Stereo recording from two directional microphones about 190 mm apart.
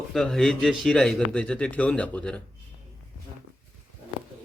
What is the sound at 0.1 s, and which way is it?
A man's voice, centre (ahead or behind).